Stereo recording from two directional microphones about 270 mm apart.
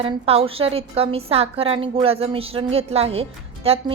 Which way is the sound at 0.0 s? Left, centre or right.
Right.